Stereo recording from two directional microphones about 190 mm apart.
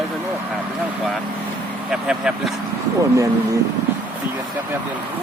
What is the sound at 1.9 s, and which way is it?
Speech, 5° right (ahead or behind).